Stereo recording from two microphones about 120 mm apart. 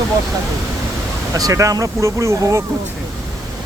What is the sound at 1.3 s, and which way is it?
Speech, 30° right (ahead or behind).